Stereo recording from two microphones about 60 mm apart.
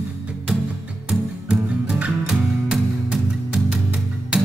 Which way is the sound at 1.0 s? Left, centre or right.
Centre.